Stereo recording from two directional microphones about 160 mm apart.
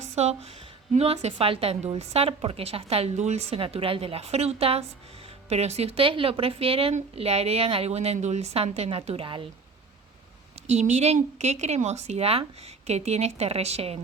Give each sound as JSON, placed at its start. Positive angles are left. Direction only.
{"t": 0.0, "sound": "a sound", "side_deg": -45}
{"t": 0.9, "sound": "a woman's voice", "side_deg": -40}
{"t": 10.7, "sound": "a woman's voice", "side_deg": -45}